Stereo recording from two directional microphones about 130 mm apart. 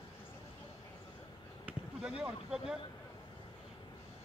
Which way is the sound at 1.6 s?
10° right (ahead or behind).